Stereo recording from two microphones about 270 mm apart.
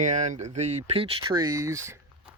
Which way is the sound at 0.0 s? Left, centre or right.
Right.